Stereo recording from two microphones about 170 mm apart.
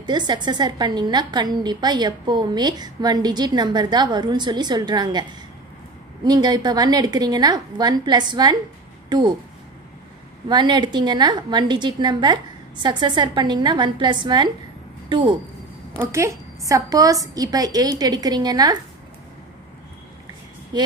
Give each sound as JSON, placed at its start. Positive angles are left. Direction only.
{"t": 0.0, "sound": "a woman's voice", "side_deg": -25}
{"t": 6.2, "sound": "a woman's voice", "side_deg": -25}
{"t": 10.5, "sound": "a woman's voice", "side_deg": -25}
{"t": 16.0, "sound": "a woman's voice", "side_deg": -15}
{"t": 20.7, "sound": "a woman's voice", "side_deg": -25}